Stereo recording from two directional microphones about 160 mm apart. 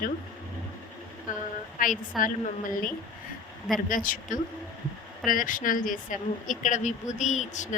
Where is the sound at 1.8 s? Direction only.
55° left (ahead or behind).